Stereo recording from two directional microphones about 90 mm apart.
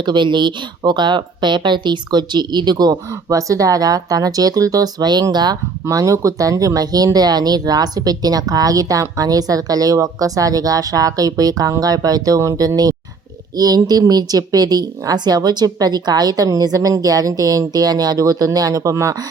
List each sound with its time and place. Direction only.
0.0 s speech: 60° right (ahead or behind)
5.8 s speech: 40° right (ahead or behind)